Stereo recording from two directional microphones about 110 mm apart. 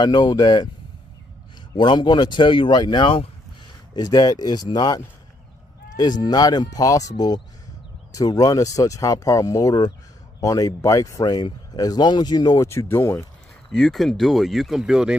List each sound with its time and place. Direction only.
0.0 s speech: 40° left (ahead or behind)
1.8 s speech: 45° left (ahead or behind)
3.9 s speech: 35° left (ahead or behind)
12.6 s speech: 25° left (ahead or behind)
13.7 s speech: 5° left (ahead or behind)